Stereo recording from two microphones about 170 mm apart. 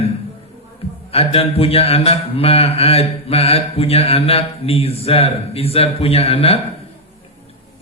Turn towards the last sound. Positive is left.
turn(degrees=35)  # may be behind; listen again after turning